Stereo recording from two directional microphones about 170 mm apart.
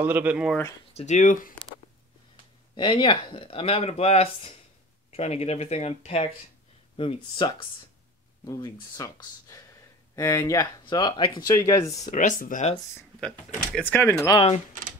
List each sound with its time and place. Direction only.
0.0 s speech: 10° right (ahead or behind)
0.9 s speech: 45° left (ahead or behind)
2.7 s speech: 30° left (ahead or behind)
12.1 s speech: 55° left (ahead or behind)
13.7 s speech: 10° left (ahead or behind)